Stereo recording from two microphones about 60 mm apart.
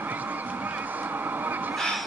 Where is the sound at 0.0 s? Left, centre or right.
Right.